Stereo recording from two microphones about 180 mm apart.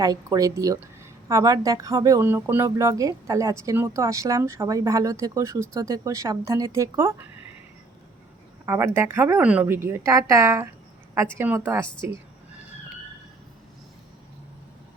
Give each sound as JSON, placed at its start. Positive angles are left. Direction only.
{"t": 0.0, "sound": "speech", "side_deg": -20}
{"t": 8.6, "sound": "speech", "side_deg": -15}